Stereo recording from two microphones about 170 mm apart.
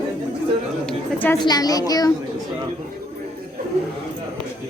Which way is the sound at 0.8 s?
10° left (ahead or behind).